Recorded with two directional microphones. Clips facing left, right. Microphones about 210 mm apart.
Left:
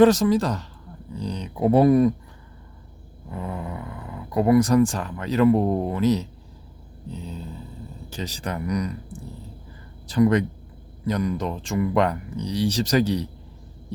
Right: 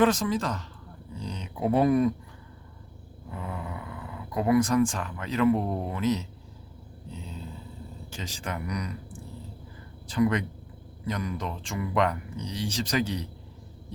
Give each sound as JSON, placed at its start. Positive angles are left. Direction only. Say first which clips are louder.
{"t": 0.0, "sound": "speech", "louder": "left 7 dB", "side_deg": 40}
{"t": 3.3, "sound": "a sound", "louder": "left 5 dB", "side_deg": 40}
{"t": 4.4, "sound": "speech", "louder": "left 5 dB", "side_deg": 40}
{"t": 8.1, "sound": "speech", "louder": "left 5 dB", "side_deg": 35}
{"t": 10.1, "sound": "speech", "louder": "left 6 dB", "side_deg": 40}